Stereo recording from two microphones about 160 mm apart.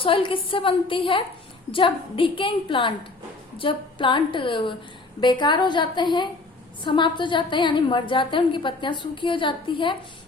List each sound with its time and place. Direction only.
0.0 s a woman's voice: 35° left (ahead or behind)